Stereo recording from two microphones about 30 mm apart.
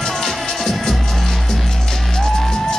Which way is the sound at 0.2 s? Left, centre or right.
Centre.